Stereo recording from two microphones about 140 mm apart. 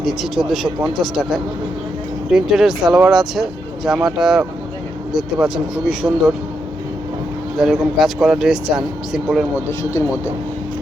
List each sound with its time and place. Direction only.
0.0 s speech: centre (ahead or behind)
7.6 s speech: centre (ahead or behind)